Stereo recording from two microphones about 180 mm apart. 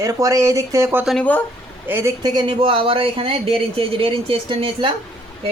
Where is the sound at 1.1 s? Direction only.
5° left (ahead or behind).